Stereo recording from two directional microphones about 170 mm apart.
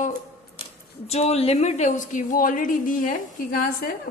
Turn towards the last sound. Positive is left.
turn(degrees=55)  # may be behind; listen again after turning